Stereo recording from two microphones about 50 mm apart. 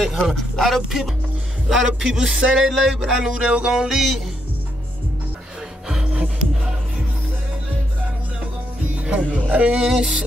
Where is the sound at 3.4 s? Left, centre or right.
Centre.